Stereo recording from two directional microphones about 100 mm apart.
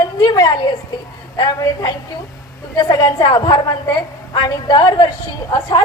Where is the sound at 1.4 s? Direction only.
40° left (ahead or behind).